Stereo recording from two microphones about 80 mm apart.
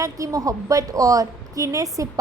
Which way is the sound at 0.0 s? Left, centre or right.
Right.